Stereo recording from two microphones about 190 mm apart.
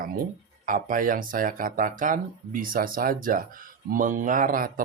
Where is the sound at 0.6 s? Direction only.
45° right (ahead or behind).